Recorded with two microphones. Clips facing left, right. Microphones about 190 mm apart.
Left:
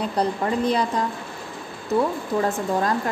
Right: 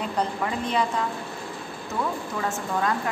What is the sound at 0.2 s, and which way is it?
Speech, 35° left (ahead or behind).